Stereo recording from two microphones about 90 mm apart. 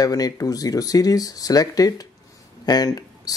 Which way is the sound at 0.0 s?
45° left (ahead or behind).